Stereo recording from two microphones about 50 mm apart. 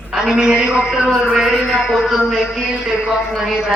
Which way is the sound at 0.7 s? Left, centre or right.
Centre.